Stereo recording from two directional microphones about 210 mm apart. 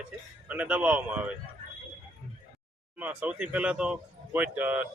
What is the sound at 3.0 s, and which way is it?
Speech, 5° right (ahead or behind).